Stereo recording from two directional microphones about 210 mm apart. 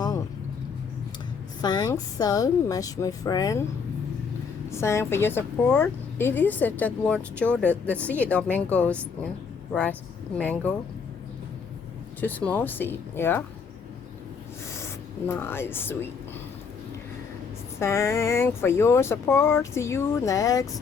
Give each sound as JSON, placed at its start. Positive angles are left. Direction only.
{"t": 1.6, "sound": "a woman's voice", "side_deg": 20}
{"t": 4.7, "sound": "a woman's voice", "side_deg": 15}
{"t": 10.3, "sound": "a woman's voice", "side_deg": 5}
{"t": 12.2, "sound": "a woman's voice", "side_deg": 5}
{"t": 15.4, "sound": "a woman's voice", "side_deg": 10}
{"t": 17.7, "sound": "a woman's voice", "side_deg": 10}